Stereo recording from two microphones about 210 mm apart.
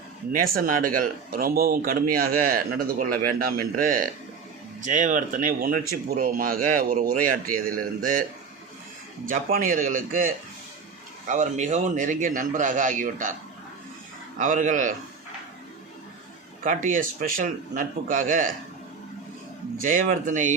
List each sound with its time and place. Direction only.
0.3 s speech: 40° right (ahead or behind)
9.2 s speech: 40° right (ahead or behind)
14.3 s speech: 35° right (ahead or behind)
16.6 s speech: 40° right (ahead or behind)
19.8 s speech: 40° right (ahead or behind)